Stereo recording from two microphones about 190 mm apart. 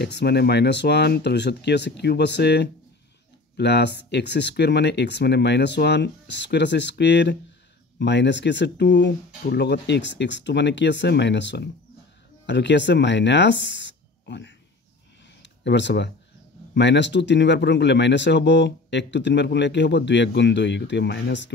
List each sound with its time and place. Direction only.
0.0 s speech: 60° left (ahead or behind)